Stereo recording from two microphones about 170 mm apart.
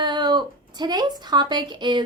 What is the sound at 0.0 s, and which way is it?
A woman's voice, 25° right (ahead or behind).